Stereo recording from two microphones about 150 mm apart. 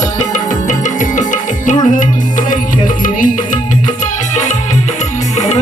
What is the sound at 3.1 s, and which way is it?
Music, 60° left (ahead or behind).